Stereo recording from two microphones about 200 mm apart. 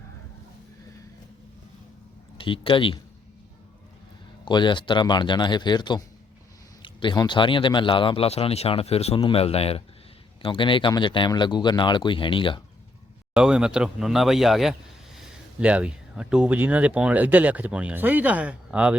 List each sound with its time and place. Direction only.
2.4 s speech: 25° left (ahead or behind)
4.4 s speech: 25° left (ahead or behind)
13.3 s speech: 5° right (ahead or behind)